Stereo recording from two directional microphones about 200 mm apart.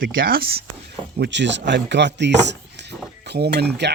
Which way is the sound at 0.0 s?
45° right (ahead or behind).